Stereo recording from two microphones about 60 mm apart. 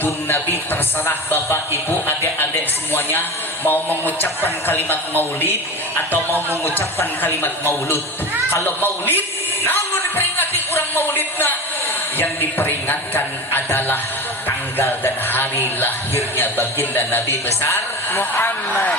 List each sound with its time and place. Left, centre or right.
0.0 s speech: left
6.3 s speech: right
6.7 s speech: left
8.6 s speech: left
10.2 s music: left
12.1 s speech: left
17.2 s speech: left